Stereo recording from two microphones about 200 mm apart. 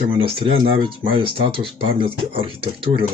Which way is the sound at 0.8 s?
25° right (ahead or behind).